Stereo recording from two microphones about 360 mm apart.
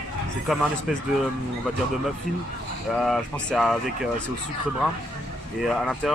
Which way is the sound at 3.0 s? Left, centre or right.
Centre.